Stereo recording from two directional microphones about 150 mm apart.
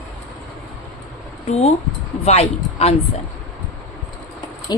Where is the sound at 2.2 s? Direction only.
45° left (ahead or behind).